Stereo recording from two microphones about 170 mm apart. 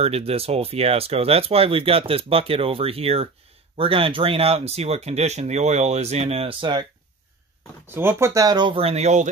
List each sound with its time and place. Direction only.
0.0 s speech: 35° right (ahead or behind)
7.9 s speech: 15° right (ahead or behind); by 9.3 s 40° right (ahead or behind)